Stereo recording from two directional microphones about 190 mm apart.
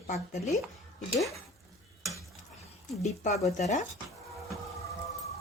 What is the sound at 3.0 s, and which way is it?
Speech, 35° left (ahead or behind).